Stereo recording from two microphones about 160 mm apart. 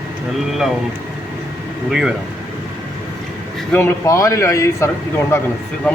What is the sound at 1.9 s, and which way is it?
Speech, 5° right (ahead or behind).